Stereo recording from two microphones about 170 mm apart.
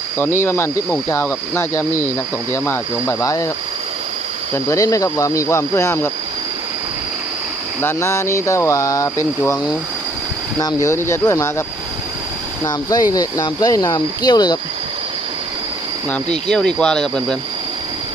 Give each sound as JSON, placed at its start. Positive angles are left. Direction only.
{"t": 0.2, "sound": "speech", "side_deg": 15}
{"t": 4.5, "sound": "speech", "side_deg": 20}
{"t": 7.8, "sound": "speech", "side_deg": 15}
{"t": 10.6, "sound": "speech", "side_deg": 20}
{"t": 12.6, "sound": "speech", "side_deg": 20}
{"t": 16.0, "sound": "speech", "side_deg": 5}